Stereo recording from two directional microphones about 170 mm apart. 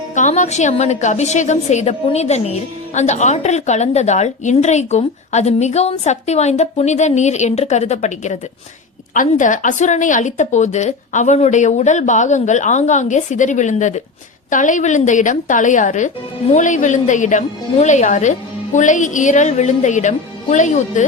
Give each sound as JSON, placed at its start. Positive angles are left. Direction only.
{"t": 0.1, "sound": "a woman's voice", "side_deg": 45}